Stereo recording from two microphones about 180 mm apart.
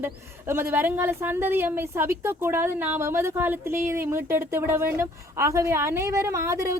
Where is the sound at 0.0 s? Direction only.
15° right (ahead or behind).